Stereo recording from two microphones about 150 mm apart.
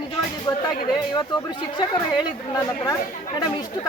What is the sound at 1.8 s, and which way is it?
Speech, 30° left (ahead or behind).